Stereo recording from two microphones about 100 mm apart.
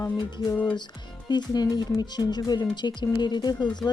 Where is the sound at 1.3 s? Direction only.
45° left (ahead or behind).